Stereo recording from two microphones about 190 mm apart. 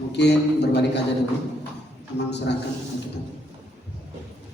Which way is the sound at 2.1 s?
65° left (ahead or behind).